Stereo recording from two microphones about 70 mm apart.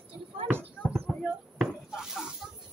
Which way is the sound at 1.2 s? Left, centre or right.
Centre.